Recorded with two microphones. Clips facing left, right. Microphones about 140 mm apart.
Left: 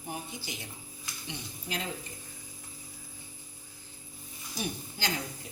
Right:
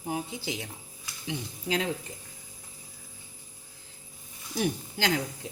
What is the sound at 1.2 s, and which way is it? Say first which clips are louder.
Speech: right 8 dB; 90° right.